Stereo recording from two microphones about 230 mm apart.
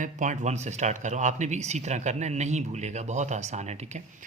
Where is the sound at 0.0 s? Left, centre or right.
Right.